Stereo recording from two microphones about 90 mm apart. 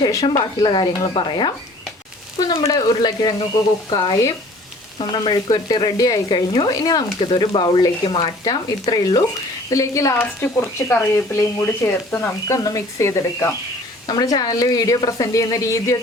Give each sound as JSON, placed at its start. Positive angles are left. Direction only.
{"t": 0.0, "sound": "a woman's voice", "side_deg": 40}
{"t": 0.6, "sound": "speech", "side_deg": 60}
{"t": 2.9, "sound": "sizzle", "side_deg": 50}
{"t": 3.8, "sound": "speech", "side_deg": 60}
{"t": 4.9, "sound": "sizzle", "side_deg": 60}
{"t": 7.2, "sound": "speech", "side_deg": 70}
{"t": 9.6, "sound": "a woman's voice", "side_deg": 35}
{"t": 12.5, "sound": "a woman's voice", "side_deg": 40}
{"t": 14.1, "sound": "a woman's voice", "side_deg": 50}